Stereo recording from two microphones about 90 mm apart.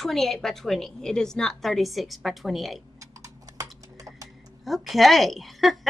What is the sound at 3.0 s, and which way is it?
Typing, 40° right (ahead or behind).